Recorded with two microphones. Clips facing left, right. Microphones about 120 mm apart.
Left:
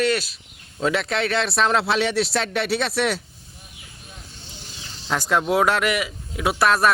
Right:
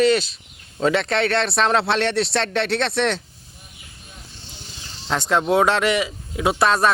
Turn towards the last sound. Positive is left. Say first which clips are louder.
# right 1 dB
turn(degrees=0)  # may be behind; listen again after turning